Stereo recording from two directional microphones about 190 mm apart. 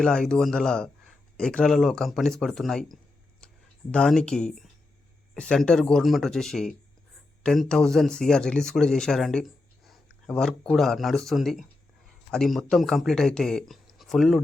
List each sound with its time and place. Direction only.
0.0 s speech: 5° left (ahead or behind)